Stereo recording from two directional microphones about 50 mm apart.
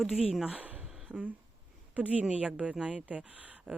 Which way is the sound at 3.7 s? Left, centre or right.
Right.